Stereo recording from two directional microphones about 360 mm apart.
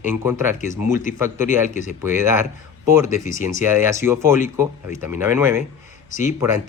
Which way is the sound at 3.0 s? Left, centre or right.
Left.